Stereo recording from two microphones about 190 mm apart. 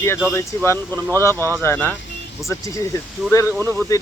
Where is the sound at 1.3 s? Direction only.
15° right (ahead or behind).